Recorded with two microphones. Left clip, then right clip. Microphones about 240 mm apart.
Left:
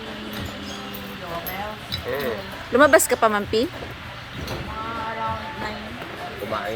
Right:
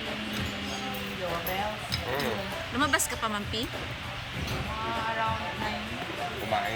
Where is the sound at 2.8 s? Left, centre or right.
Centre.